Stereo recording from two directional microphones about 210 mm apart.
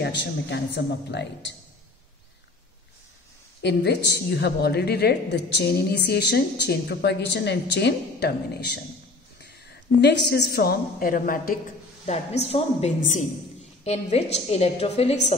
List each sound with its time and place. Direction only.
0.0 s speech: 55° left (ahead or behind)
3.6 s a woman's voice: 55° left (ahead or behind)
9.9 s a woman's voice: 55° left (ahead or behind)
12.1 s a woman's voice: 30° left (ahead or behind)